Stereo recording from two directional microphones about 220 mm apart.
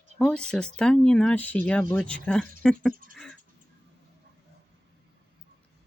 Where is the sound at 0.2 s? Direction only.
5° left (ahead or behind).